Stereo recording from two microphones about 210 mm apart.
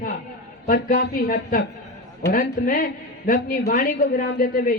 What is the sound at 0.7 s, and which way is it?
A man's voice, 40° left (ahead or behind).